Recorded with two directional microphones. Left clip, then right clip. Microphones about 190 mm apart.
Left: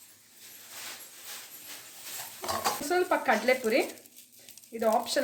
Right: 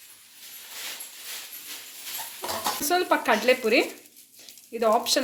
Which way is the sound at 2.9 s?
40° right (ahead or behind).